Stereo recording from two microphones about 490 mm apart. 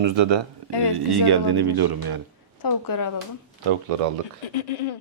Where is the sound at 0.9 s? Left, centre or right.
Right.